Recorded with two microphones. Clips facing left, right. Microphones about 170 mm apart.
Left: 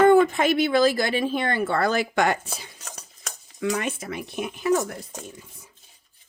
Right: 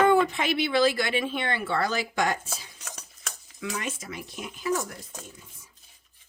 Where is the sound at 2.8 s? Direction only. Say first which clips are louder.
Left 2 dB; 35° left (ahead or behind).